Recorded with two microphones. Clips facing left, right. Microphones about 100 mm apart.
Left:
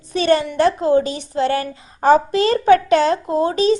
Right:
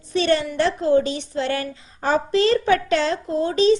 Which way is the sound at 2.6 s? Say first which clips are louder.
Left 6 dB; 45° left (ahead or behind).